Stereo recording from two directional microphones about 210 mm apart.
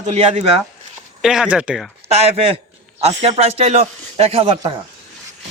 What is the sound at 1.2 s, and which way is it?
Speech, 5° right (ahead or behind).